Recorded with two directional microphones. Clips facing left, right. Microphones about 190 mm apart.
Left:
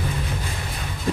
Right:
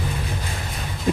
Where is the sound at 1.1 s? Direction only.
15° right (ahead or behind).